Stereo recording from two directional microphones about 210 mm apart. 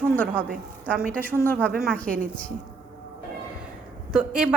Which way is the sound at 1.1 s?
10° left (ahead or behind).